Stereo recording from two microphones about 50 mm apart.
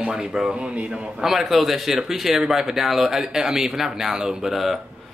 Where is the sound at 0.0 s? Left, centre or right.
Centre.